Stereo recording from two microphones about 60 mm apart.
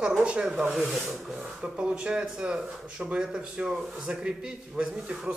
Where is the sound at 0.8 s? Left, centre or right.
Centre.